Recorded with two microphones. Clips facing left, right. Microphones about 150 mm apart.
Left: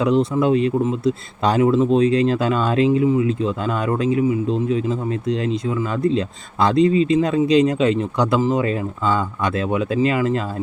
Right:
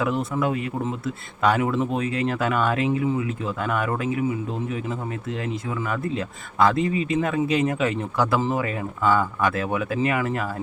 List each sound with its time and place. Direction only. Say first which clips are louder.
0.0 s speech: left 7 dB; 20° left (ahead or behind)